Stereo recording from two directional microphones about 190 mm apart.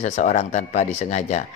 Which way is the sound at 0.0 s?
40° left (ahead or behind).